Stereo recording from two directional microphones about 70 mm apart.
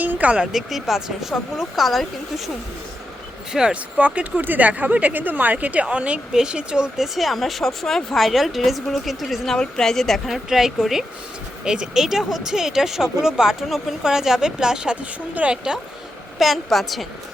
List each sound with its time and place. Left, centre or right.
0.0 s music: right
0.5 s speech: centre
3.5 s speech: centre
16.4 s speech: centre